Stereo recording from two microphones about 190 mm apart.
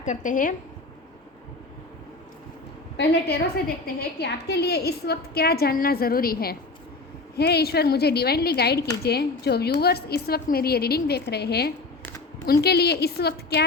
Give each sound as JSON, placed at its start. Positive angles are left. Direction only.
{"t": 0.0, "sound": "a woman's voice", "side_deg": 40}
{"t": 3.0, "sound": "a woman's voice", "side_deg": 60}